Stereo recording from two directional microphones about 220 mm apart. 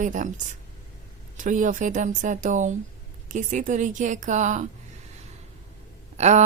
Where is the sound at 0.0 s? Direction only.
35° right (ahead or behind).